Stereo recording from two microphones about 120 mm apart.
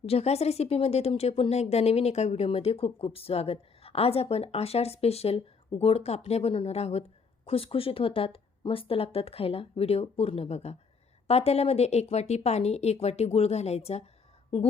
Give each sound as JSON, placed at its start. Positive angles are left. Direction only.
{"t": 0.0, "sound": "a woman's voice", "side_deg": 60}